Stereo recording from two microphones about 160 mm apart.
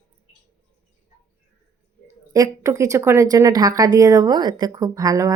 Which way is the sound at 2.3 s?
20° right (ahead or behind).